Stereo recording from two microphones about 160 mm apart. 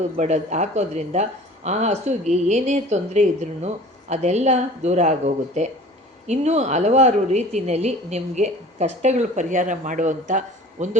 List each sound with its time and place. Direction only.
0.2 s speech: 45° right (ahead or behind)